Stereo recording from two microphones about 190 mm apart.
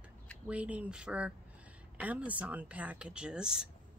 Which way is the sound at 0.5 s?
5° right (ahead or behind).